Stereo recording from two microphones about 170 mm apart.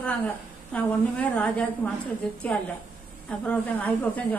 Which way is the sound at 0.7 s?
10° left (ahead or behind).